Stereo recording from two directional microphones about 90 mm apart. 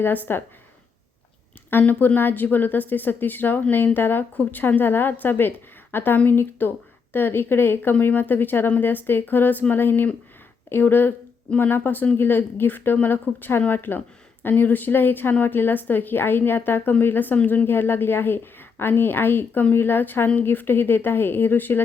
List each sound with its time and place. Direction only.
0.0 s speech: 20° left (ahead or behind)
1.8 s speech: 20° left (ahead or behind)